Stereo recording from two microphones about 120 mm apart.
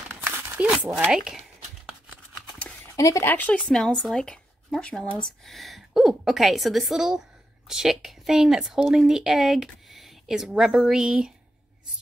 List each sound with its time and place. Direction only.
0.1 s a sound: 20° right (ahead or behind)
1.1 s speech: 5° right (ahead or behind)
3.0 s speech: 25° left (ahead or behind)
3.3 s a woman's voice: 15° left (ahead or behind); by 11.3 s 5° right (ahead or behind)